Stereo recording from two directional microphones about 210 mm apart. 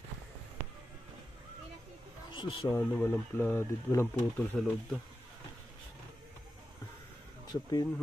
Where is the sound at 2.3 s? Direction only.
25° left (ahead or behind).